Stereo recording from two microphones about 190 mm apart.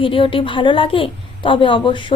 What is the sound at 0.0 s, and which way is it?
A woman's voice, 25° left (ahead or behind).